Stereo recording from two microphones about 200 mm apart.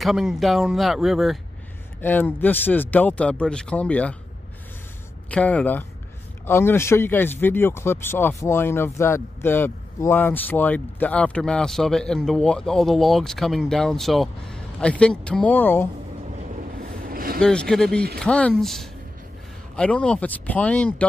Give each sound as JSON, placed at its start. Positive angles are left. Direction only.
{"t": 0.0, "sound": "speech", "side_deg": 0}
{"t": 5.3, "sound": "speech", "side_deg": 5}
{"t": 17.0, "sound": "vehicle", "side_deg": -45}
{"t": 17.4, "sound": "speech", "side_deg": 5}